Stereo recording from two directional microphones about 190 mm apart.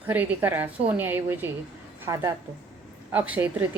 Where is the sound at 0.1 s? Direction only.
10° right (ahead or behind).